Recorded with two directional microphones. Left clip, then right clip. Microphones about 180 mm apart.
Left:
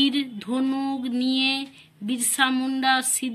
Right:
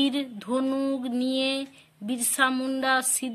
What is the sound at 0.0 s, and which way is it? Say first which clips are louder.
A woman's voice: left 4 dB; 50° right (ahead or behind).